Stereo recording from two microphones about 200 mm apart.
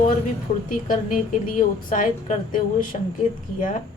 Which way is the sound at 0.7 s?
40° left (ahead or behind).